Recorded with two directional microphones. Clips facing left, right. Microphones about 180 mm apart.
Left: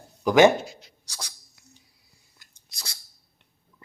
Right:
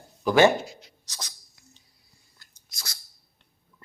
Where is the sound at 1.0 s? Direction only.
10° left (ahead or behind).